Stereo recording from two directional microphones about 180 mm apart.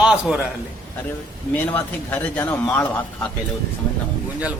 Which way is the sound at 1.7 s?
10° left (ahead or behind).